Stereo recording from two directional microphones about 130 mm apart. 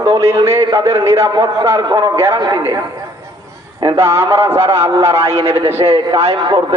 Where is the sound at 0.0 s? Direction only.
20° right (ahead or behind).